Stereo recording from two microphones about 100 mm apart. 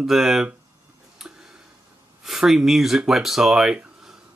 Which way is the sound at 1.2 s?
5° right (ahead or behind).